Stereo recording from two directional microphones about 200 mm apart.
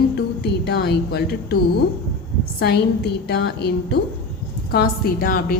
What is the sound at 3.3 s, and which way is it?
A woman's voice, 55° left (ahead or behind).